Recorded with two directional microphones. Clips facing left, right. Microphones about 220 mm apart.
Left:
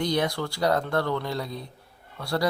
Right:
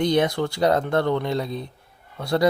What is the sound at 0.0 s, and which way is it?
Speech, 20° right (ahead or behind).